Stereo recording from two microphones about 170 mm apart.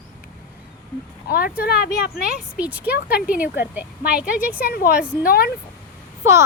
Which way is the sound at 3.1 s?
70° left (ahead or behind).